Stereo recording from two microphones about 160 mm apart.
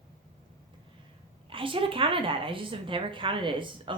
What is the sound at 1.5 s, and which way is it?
A woman's voice, 35° right (ahead or behind).